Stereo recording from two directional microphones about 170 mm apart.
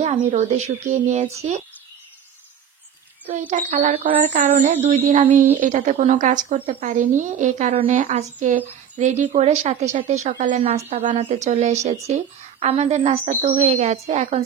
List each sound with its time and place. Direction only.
0.0 s speech: 50° right (ahead or behind)
3.3 s a woman's voice: 45° right (ahead or behind)